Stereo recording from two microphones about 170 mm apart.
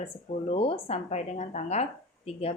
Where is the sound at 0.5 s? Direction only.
40° left (ahead or behind).